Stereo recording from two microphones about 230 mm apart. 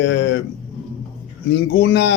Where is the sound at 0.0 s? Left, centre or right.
Left.